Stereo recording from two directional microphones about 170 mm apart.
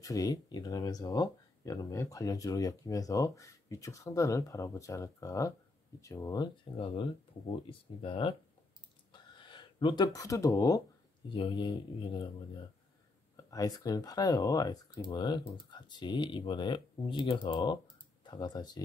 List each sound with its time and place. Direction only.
0.0 s speech: 20° left (ahead or behind)
9.4 s speech: 30° left (ahead or behind)
11.2 s speech: 30° left (ahead or behind)
13.5 s speech: 20° left (ahead or behind)